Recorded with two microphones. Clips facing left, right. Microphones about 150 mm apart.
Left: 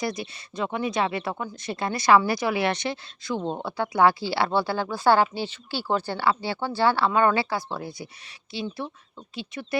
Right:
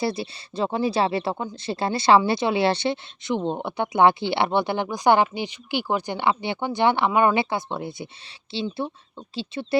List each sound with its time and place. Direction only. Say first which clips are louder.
0.0 s speech: right 4 dB; 30° right (ahead or behind)